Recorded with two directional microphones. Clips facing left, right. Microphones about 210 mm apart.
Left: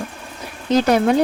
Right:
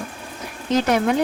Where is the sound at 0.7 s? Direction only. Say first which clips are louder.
Left 3 dB; 35° left (ahead or behind).